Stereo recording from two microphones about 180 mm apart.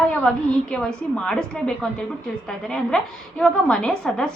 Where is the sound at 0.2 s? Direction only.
5° left (ahead or behind).